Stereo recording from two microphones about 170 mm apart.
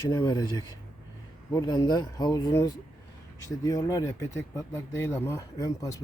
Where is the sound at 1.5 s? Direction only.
20° left (ahead or behind).